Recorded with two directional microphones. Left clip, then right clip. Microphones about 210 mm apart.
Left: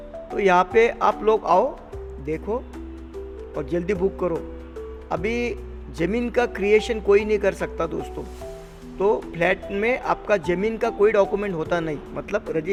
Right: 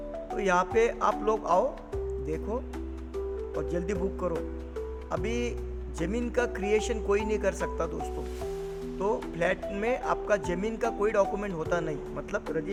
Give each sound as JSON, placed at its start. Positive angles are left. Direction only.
{"t": 0.3, "sound": "speech", "side_deg": 30}
{"t": 3.6, "sound": "speech", "side_deg": 25}